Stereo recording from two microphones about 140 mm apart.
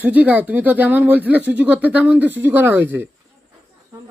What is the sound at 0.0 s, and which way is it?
Speech, 10° right (ahead or behind).